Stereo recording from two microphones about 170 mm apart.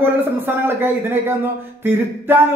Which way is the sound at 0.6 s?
15° right (ahead or behind).